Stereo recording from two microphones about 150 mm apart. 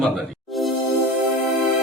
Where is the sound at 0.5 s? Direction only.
Centre (ahead or behind).